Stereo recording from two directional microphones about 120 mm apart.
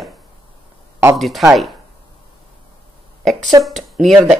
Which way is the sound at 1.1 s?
Centre (ahead or behind).